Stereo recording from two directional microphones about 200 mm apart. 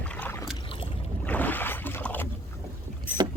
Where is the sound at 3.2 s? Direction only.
20° right (ahead or behind).